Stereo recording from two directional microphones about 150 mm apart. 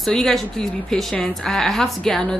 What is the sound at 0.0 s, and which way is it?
A woman's voice, centre (ahead or behind).